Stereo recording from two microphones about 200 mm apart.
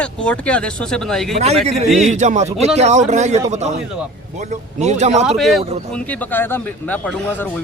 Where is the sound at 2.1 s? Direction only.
35° right (ahead or behind).